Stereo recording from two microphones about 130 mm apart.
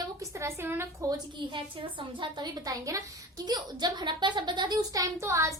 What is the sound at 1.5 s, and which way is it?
A woman's voice, 40° right (ahead or behind).